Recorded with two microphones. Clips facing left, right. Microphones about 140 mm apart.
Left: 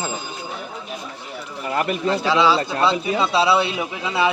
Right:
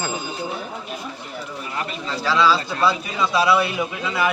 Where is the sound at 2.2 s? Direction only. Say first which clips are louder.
Right 1 dB; 20° left (ahead or behind).